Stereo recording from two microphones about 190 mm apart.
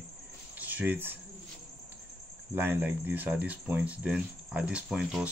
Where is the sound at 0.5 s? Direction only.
10° right (ahead or behind).